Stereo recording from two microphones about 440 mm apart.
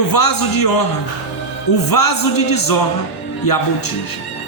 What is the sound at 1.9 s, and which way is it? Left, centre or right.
Speech, left.